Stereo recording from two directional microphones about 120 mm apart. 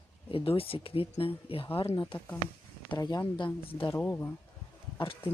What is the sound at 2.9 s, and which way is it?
Speech, 35° left (ahead or behind).